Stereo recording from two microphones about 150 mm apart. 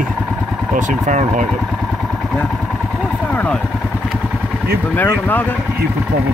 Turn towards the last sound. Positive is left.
turn(degrees=10)  # may be behind; listen again after turning